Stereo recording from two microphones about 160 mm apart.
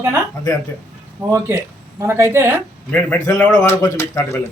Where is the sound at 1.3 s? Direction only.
15° right (ahead or behind).